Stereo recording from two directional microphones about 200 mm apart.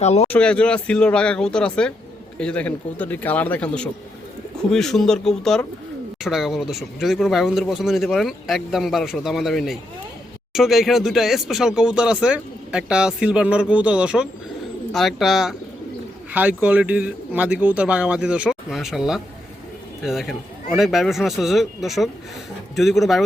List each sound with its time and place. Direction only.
0.0 s speech: 35° left (ahead or behind)
0.3 s a man's voice: 5° left (ahead or behind)